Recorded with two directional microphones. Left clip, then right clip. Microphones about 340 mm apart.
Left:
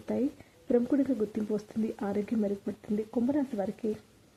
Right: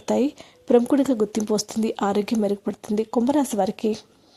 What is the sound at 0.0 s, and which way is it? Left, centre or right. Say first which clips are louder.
A woman's voice: right 10 dB; right.